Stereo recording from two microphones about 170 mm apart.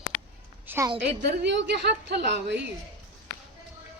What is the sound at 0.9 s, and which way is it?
A woman's voice, 85° right.